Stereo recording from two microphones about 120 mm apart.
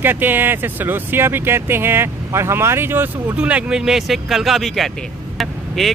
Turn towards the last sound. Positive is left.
turn(degrees=0)  # may be behind; listen again after turning